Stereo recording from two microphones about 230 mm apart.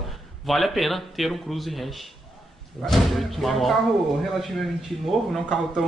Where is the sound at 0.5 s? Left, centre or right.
Centre.